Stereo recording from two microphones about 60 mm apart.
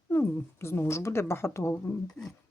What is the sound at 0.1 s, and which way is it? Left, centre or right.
Speech, left.